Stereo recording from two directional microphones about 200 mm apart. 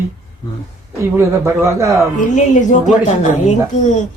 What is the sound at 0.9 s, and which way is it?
Speech, 15° right (ahead or behind).